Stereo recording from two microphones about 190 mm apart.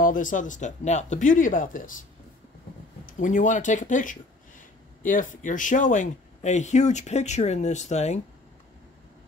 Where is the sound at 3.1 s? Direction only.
45° left (ahead or behind).